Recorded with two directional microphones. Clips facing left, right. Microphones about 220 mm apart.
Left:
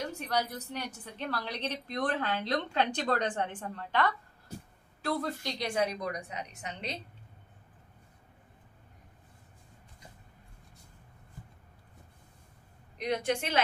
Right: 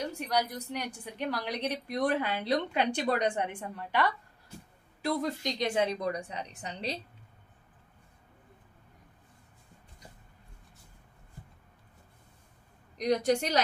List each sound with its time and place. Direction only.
0.3 s a woman's voice: 15° right (ahead or behind); by 7.0 s 35° right (ahead or behind)
12.9 s a woman's voice: 40° right (ahead or behind)